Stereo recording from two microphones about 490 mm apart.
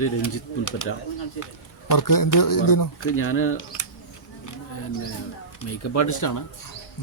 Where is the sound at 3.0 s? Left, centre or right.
Left.